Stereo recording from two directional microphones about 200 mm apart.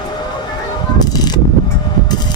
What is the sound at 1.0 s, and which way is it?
Vehicle, 20° left (ahead or behind).